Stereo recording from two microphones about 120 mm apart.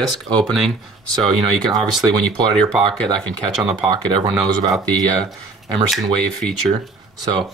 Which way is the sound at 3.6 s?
5° right (ahead or behind).